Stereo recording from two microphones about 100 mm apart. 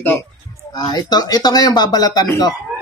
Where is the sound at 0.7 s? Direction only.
45° left (ahead or behind).